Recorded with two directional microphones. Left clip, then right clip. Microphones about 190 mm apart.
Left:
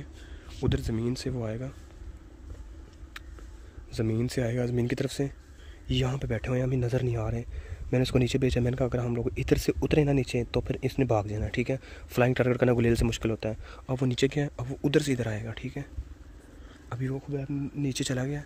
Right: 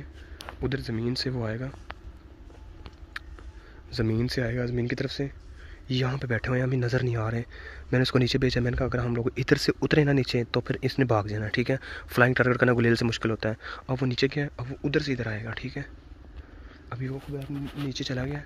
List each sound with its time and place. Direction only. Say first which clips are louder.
0.6 s speech: even; 15° left (ahead or behind)
3.9 s speech: right 2 dB; centre (ahead or behind)
13.9 s speech: even; 15° left (ahead or behind)
16.9 s speech: left 2 dB; 30° left (ahead or behind)